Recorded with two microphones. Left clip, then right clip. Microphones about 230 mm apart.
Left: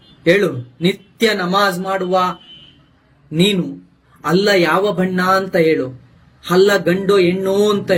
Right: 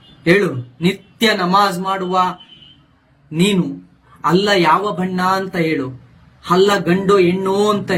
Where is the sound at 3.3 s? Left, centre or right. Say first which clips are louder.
Left 1 dB; centre.